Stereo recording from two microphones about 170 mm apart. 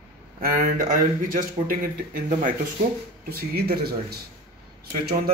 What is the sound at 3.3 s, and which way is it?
Speech, 65° right (ahead or behind).